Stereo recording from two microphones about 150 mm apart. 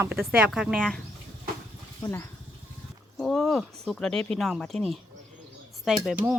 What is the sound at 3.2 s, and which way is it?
Speech, 5° left (ahead or behind).